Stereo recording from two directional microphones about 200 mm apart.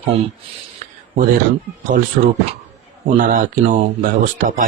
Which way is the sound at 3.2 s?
40° right (ahead or behind).